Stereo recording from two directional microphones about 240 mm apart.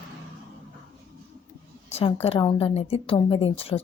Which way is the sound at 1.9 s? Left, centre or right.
Left.